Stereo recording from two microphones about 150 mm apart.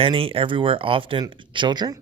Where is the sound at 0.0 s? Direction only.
35° right (ahead or behind).